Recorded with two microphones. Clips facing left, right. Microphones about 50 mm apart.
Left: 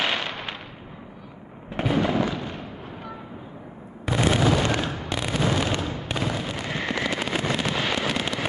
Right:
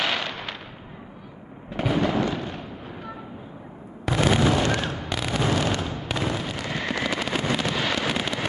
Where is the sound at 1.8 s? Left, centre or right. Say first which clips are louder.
Even; centre.